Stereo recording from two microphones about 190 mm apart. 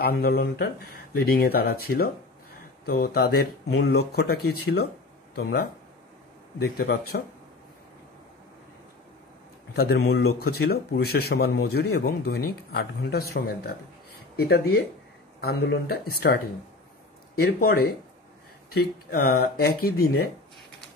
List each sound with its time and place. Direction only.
0.0 s speech: 50° left (ahead or behind)
9.8 s speech: 60° left (ahead or behind)
17.4 s speech: 50° left (ahead or behind)